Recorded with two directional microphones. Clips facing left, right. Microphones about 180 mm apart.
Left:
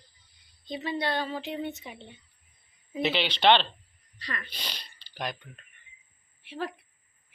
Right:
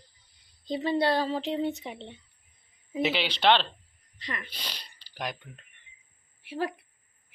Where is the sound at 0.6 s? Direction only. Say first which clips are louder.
Right 5 dB; 35° right (ahead or behind).